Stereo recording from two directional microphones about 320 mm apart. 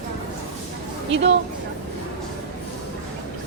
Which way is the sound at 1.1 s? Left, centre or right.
Right.